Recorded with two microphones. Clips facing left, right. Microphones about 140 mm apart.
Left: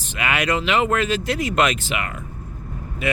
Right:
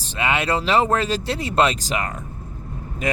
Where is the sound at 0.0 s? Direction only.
30° right (ahead or behind).